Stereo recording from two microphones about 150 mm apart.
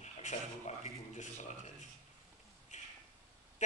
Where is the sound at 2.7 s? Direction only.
55° left (ahead or behind).